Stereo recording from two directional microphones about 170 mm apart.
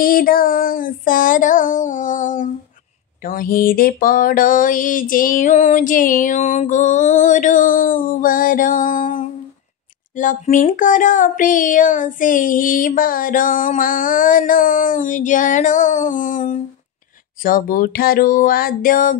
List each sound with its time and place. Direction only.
0.0 s speech: 55° left (ahead or behind)